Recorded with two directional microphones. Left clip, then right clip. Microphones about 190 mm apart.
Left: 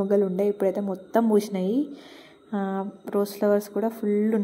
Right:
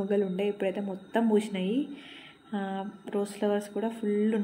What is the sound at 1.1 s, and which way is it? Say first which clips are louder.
Speech: left 5 dB; centre (ahead or behind).